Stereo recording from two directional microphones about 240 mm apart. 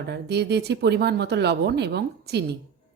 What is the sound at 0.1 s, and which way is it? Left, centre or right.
A woman's voice, right.